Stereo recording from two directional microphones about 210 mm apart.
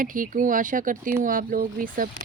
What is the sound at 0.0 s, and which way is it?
Speech, 40° right (ahead or behind).